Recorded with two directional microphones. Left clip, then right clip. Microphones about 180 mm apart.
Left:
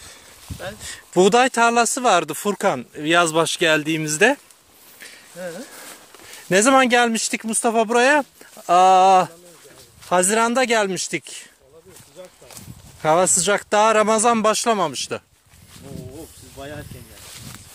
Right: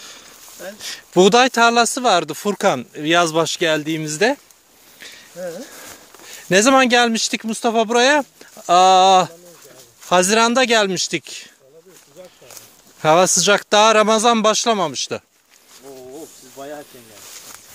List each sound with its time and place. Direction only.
0.7 s speech: 25° right (ahead or behind); by 4.4 s centre (ahead or behind)
5.7 s a sound: 15° right (ahead or behind)
6.5 s speech: 15° right (ahead or behind)
13.0 s speech: 25° right (ahead or behind)